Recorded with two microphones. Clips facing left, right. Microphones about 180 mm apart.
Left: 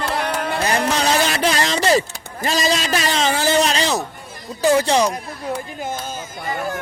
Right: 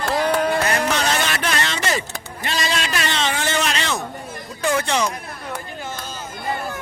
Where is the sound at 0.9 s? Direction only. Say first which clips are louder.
Left 3 dB; 35° left (ahead or behind).